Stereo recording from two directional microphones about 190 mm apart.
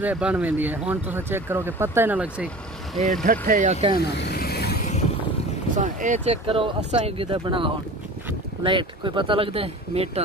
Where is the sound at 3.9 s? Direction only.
60° left (ahead or behind).